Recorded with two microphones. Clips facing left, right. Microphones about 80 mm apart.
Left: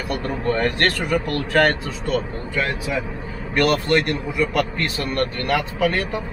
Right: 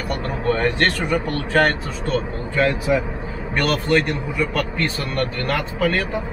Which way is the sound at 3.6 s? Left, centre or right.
Centre.